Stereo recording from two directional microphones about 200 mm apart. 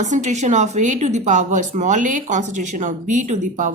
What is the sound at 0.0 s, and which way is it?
A woman's voice, 35° right (ahead or behind).